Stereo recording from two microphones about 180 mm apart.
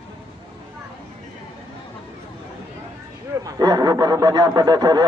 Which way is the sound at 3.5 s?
20° right (ahead or behind).